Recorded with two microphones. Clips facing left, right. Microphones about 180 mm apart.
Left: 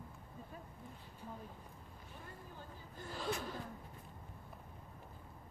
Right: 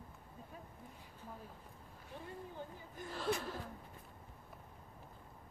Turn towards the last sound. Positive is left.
turn(degrees=0)  # may be behind; listen again after turning